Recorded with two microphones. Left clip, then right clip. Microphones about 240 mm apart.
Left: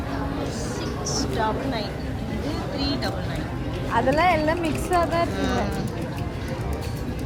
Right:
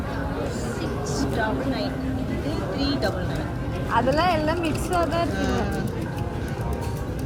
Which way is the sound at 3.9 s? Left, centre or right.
Left.